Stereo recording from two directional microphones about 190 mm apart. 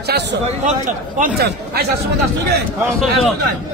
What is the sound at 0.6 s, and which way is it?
Speech, 45° right (ahead or behind).